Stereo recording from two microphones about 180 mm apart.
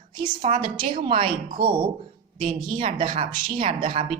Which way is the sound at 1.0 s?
30° right (ahead or behind).